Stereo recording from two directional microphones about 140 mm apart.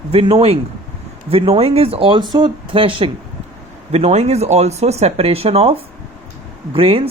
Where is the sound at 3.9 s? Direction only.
50° right (ahead or behind).